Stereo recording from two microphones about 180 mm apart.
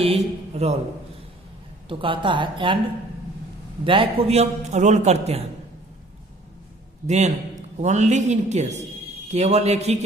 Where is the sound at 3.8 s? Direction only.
30° right (ahead or behind).